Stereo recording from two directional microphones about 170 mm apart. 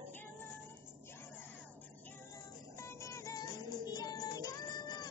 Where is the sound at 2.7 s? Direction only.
15° left (ahead or behind).